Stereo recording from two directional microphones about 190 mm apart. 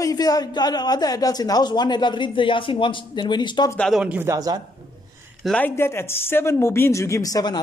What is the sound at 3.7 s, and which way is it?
Speech, centre (ahead or behind).